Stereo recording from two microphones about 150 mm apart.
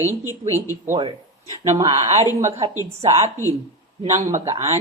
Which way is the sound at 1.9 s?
45° right (ahead or behind).